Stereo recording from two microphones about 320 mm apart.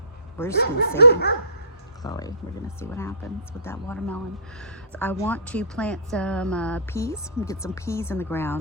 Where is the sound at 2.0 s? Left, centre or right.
Centre.